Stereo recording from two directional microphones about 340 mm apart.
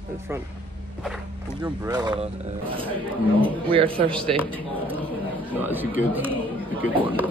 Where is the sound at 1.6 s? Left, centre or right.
Centre.